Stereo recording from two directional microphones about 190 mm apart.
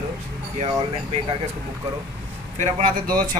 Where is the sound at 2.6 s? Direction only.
45° right (ahead or behind).